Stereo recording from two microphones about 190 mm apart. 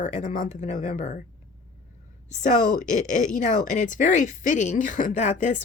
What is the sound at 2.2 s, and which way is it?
A woman's voice, 40° left (ahead or behind).